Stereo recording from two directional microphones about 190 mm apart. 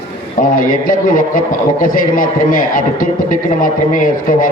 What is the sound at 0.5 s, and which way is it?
A man's voice, 45° left (ahead or behind).